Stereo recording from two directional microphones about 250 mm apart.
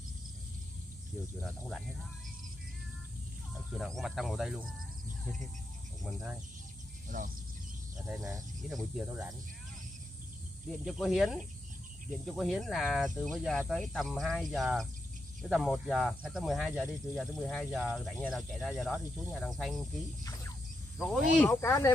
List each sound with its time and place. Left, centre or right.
1.4 s speech: centre
3.7 s speech: centre
7.1 s speech: right
8.1 s speech: centre
10.7 s speech: centre
21.0 s speech: centre